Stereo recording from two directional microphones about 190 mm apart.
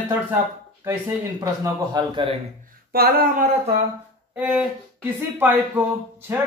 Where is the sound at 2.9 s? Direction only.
50° right (ahead or behind).